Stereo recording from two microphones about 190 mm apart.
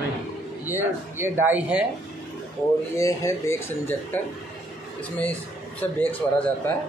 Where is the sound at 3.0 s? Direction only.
15° left (ahead or behind).